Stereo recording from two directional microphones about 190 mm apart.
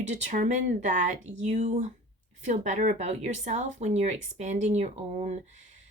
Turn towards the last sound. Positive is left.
turn(degrees=-35)  # may be behind; listen again after turning